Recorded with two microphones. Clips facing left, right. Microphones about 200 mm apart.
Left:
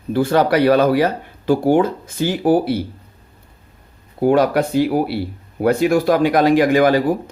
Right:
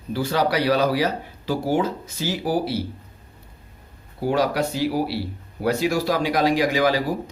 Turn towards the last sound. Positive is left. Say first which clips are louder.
# left 7 dB
turn(degrees=55)  # may be behind; listen again after turning